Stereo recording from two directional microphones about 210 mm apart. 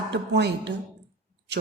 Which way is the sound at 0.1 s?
55° right (ahead or behind).